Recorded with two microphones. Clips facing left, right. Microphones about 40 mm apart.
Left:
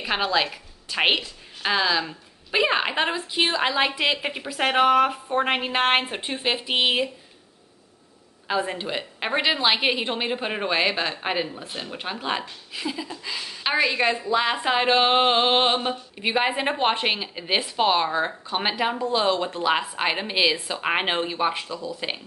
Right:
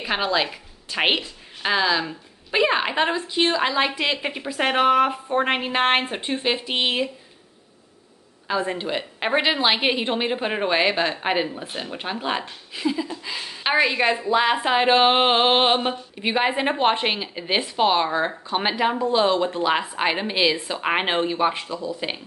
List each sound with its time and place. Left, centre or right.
0.0 s a woman's voice: centre
8.5 s speech: centre
8.7 s a woman's voice: centre
16.2 s a woman's voice: centre